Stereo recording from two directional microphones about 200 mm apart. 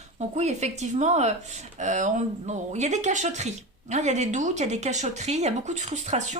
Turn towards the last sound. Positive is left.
turn(degrees=-35)  # may be behind; listen again after turning